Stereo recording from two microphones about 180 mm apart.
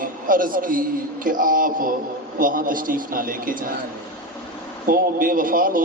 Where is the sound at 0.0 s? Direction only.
50° right (ahead or behind).